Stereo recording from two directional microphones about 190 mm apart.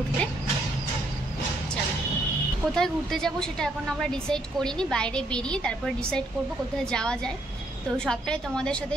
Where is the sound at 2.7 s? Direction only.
Centre (ahead or behind).